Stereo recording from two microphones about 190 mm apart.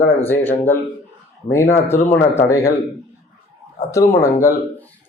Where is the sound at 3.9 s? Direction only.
15° left (ahead or behind).